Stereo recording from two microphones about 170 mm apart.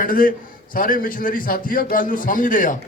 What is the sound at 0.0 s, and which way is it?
A man's voice, 55° left (ahead or behind).